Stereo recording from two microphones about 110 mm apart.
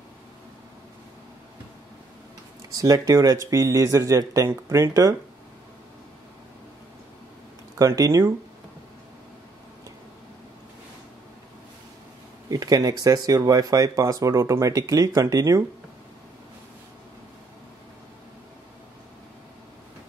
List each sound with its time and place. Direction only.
2.7 s speech: 30° right (ahead or behind)
7.8 s speech: 30° right (ahead or behind)
12.4 s speech: 35° right (ahead or behind)